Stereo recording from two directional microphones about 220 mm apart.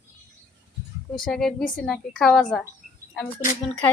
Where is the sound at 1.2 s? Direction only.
Centre (ahead or behind).